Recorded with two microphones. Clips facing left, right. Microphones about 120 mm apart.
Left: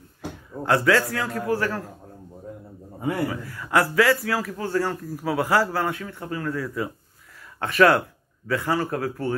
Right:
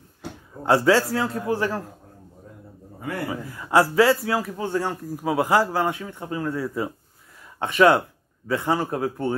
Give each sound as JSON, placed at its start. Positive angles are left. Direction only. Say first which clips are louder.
{"t": 0.7, "sound": "a man's voice", "louder": "right 2 dB", "side_deg": -30}
{"t": 3.3, "sound": "a man's voice", "louder": "right 1 dB", "side_deg": -20}